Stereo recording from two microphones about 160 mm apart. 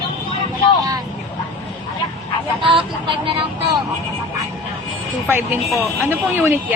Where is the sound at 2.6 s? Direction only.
30° right (ahead or behind).